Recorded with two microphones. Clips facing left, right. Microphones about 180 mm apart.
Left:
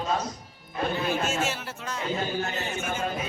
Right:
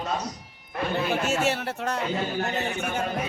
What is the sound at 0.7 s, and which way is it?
A man's voice, 65° right (ahead or behind).